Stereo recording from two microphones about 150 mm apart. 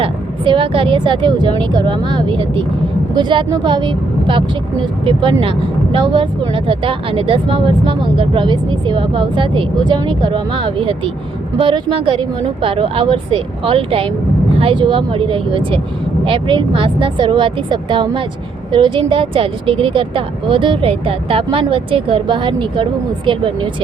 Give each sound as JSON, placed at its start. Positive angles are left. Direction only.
{"t": 0.0, "sound": "speech", "side_deg": -35}